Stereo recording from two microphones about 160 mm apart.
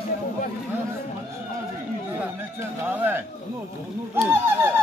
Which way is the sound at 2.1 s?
15° right (ahead or behind).